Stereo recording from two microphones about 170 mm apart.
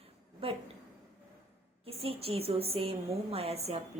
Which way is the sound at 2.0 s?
35° right (ahead or behind).